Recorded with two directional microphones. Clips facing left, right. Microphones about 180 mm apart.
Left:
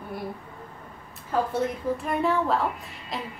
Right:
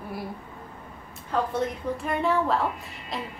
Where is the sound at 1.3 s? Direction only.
5° left (ahead or behind).